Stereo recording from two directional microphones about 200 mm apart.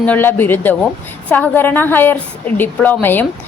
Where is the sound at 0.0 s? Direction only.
10° left (ahead or behind).